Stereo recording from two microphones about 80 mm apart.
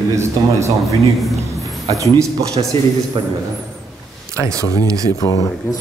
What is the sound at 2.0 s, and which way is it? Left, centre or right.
Speech, right.